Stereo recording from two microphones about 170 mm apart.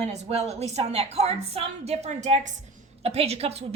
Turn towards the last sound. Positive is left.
turn(degrees=-35)  # may be behind; listen again after turning